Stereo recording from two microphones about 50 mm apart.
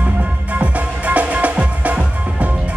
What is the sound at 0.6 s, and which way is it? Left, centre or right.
Music, right.